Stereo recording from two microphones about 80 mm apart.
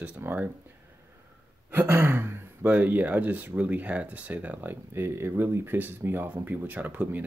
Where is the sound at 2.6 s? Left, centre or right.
Right.